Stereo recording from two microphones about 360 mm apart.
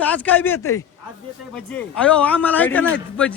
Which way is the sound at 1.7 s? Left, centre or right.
Centre.